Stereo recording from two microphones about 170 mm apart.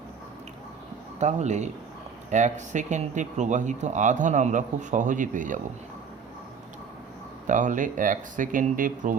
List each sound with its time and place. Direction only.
1.2 s speech: 45° right (ahead or behind)
7.4 s speech: 50° right (ahead or behind)